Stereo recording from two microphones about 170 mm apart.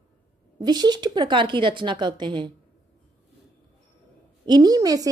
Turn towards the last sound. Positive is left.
turn(degrees=-20)  # may be behind; listen again after turning